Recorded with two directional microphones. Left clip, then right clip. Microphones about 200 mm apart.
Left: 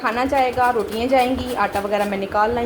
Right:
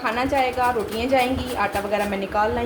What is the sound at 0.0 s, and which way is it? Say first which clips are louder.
A woman's voice: left 3 dB; 25° left (ahead or behind).